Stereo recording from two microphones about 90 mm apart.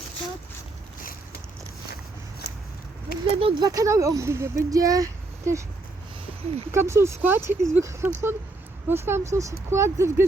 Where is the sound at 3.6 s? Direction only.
40° right (ahead or behind).